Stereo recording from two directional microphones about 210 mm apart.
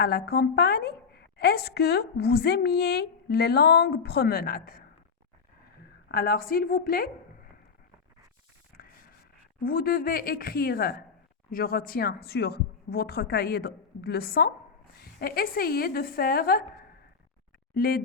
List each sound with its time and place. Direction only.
0.0 s a woman's voice: 50° left (ahead or behind)
6.1 s a woman's voice: 45° left (ahead or behind)
8.7 s a sound: 45° left (ahead or behind)
9.6 s a woman's voice: 45° left (ahead or behind)